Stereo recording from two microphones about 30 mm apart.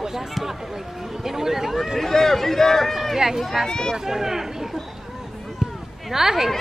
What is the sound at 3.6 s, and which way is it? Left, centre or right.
Speech, left.